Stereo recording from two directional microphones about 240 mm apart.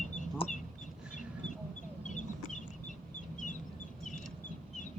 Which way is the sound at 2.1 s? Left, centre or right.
Left.